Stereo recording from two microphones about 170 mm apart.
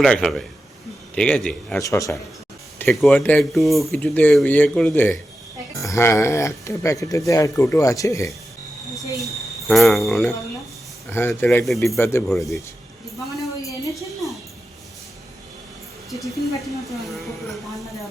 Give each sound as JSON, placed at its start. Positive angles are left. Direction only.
{"t": 0.0, "sound": "speech", "side_deg": 5}
{"t": 1.8, "sound": "speech", "side_deg": 20}
{"t": 2.9, "sound": "speech", "side_deg": 0}
{"t": 9.1, "sound": "speech", "side_deg": 0}
{"t": 11.1, "sound": "speech", "side_deg": 15}
{"t": 11.4, "sound": "speech", "side_deg": 0}
{"t": 11.9, "sound": "speech", "side_deg": 15}
{"t": 12.3, "sound": "speech", "side_deg": 0}
{"t": 16.2, "sound": "speech", "side_deg": 0}